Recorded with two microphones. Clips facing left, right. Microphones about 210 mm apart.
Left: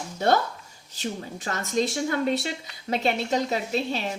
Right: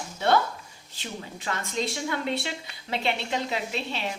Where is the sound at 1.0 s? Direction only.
40° left (ahead or behind).